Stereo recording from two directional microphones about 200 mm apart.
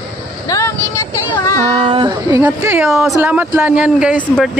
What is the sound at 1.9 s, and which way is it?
Speech, 25° right (ahead or behind).